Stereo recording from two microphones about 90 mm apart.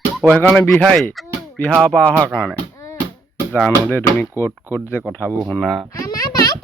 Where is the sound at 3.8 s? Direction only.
25° left (ahead or behind).